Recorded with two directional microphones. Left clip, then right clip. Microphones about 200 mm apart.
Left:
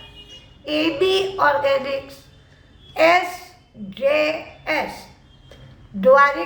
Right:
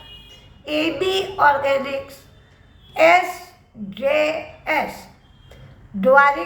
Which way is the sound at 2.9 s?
10° left (ahead or behind).